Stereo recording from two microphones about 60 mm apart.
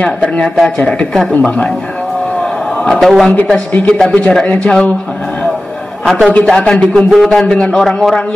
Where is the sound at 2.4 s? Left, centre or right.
Centre.